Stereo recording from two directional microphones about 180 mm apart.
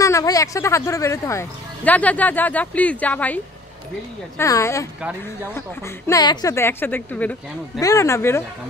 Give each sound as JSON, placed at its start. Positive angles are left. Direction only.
{"t": 0.0, "sound": "speech", "side_deg": 20}
{"t": 4.4, "sound": "speech", "side_deg": 15}
{"t": 6.0, "sound": "speech", "side_deg": 20}